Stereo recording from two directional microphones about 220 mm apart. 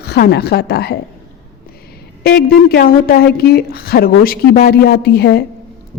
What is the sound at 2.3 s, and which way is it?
A woman's voice, 45° left (ahead or behind).